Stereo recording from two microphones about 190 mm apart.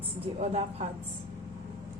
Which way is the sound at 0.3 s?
35° right (ahead or behind).